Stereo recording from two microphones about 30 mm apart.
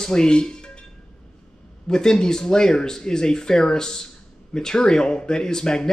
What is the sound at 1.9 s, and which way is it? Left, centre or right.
Speech, left.